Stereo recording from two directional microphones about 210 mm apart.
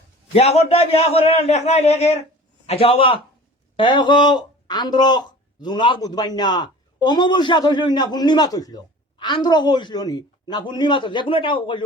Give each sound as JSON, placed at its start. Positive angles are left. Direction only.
{"t": 0.3, "sound": "a man's voice", "side_deg": 30}